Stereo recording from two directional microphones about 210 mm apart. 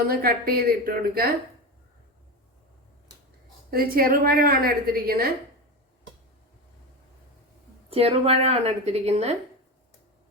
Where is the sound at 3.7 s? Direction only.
45° right (ahead or behind).